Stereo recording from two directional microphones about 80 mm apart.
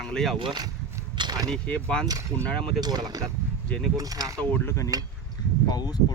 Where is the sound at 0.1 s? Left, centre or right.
Centre.